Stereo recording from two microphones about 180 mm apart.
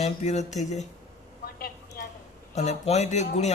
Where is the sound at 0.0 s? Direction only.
40° left (ahead or behind).